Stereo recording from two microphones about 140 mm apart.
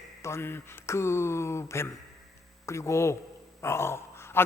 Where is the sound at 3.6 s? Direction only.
20° left (ahead or behind).